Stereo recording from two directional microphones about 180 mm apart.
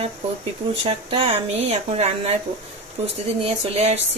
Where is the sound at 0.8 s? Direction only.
30° right (ahead or behind).